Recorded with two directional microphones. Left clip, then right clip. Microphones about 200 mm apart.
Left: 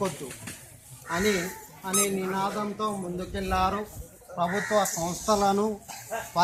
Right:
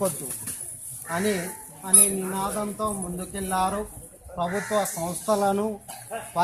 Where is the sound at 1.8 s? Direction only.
55° right (ahead or behind).